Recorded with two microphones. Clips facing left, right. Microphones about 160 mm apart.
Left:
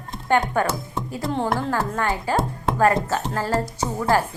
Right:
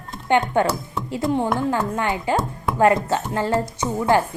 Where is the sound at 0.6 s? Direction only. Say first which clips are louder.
Right 3 dB; 25° right (ahead or behind).